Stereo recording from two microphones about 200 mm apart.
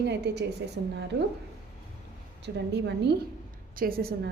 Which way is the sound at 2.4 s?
60° right (ahead or behind).